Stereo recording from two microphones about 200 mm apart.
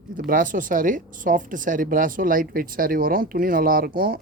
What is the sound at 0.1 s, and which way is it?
Speech, 45° right (ahead or behind).